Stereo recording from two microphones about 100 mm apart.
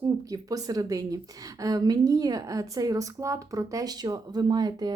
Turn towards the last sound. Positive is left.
turn(degrees=-40)  # may be behind; listen again after turning